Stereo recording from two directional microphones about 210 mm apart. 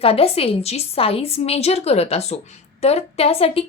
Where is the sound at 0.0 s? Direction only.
25° left (ahead or behind).